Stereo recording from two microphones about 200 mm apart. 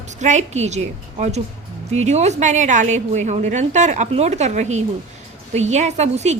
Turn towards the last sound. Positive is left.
turn(degrees=-35)  # may be behind; listen again after turning